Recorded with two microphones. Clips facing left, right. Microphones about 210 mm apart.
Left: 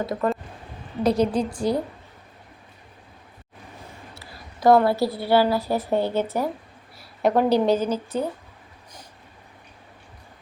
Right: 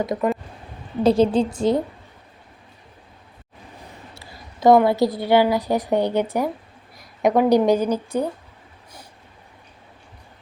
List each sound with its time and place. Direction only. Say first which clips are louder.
0.0 s a woman's voice: right 2 dB; 15° right (ahead or behind)
1.0 s a woman's voice: right 4 dB; 25° right (ahead or behind)
4.6 s a woman's voice: right 3 dB; 20° right (ahead or behind)